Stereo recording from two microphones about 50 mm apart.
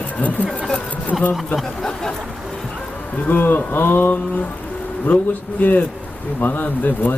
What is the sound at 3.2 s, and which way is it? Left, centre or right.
Speech, left.